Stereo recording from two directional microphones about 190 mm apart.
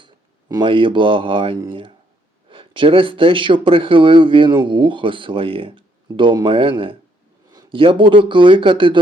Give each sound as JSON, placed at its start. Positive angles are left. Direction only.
{"t": 0.0, "sound": "speech", "side_deg": -20}